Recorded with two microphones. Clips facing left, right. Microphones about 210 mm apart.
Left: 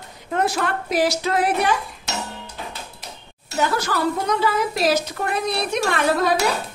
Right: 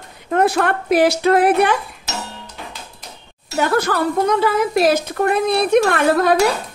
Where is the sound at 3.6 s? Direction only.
60° right (ahead or behind).